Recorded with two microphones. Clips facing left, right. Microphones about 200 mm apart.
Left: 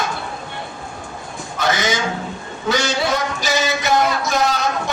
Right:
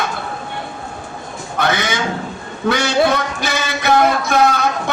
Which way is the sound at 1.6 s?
60° right (ahead or behind).